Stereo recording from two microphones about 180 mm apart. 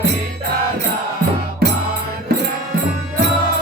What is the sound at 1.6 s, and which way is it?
Music, 60° right (ahead or behind).